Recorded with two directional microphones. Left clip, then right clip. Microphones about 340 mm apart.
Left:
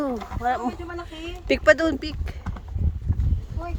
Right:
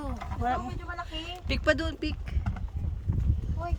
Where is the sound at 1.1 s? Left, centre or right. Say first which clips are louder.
Left 14 dB; centre.